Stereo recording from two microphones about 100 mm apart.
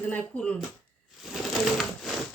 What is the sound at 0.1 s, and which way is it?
Speech, 10° left (ahead or behind).